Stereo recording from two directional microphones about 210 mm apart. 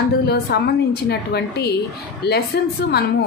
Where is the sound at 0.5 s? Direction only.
50° left (ahead or behind).